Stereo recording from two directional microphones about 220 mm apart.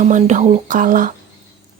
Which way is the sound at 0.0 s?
35° right (ahead or behind).